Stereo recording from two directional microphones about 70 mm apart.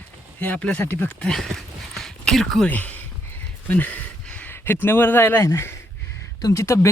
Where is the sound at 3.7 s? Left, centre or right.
Left.